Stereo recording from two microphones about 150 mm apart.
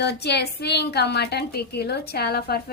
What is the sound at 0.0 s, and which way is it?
A woman's voice, 90° left.